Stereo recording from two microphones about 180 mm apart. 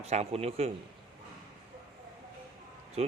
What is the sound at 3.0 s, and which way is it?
Speech, 35° right (ahead or behind).